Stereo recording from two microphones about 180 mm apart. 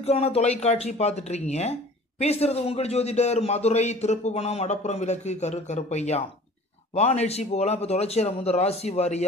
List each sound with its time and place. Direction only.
0.0 s speech: 35° left (ahead or behind)